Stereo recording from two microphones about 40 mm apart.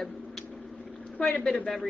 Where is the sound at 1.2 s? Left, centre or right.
Left.